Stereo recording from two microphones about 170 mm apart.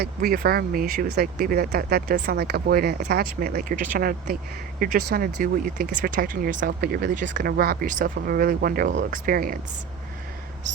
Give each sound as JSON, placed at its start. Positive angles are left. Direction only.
{"t": 0.0, "sound": "speech", "side_deg": -60}
{"t": 6.7, "sound": "speech", "side_deg": -70}